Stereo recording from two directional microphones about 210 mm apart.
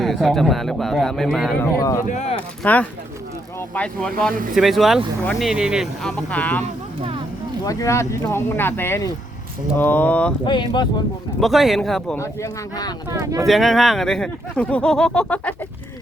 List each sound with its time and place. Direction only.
0.0 s speech: centre (ahead or behind)
2.0 s speech: 30° left (ahead or behind)
2.6 s speech: 10° left (ahead or behind)
10.4 s speech: 20° left (ahead or behind)
11.3 s speech: centre (ahead or behind); by 12.9 s 15° left (ahead or behind)
13.1 s speech: 15° right (ahead or behind)
13.4 s speech: centre (ahead or behind)